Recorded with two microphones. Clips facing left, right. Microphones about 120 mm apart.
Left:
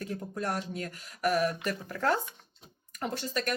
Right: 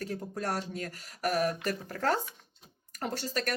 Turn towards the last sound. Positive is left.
turn(degrees=-40)  # may be behind; listen again after turning